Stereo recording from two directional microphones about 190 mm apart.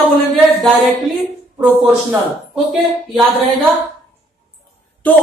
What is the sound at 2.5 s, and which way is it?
Speech, 5° right (ahead or behind).